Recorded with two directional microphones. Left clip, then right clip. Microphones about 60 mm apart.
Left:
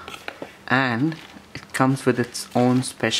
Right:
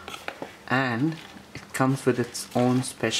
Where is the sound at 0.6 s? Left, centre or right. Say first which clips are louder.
Left 5 dB; centre.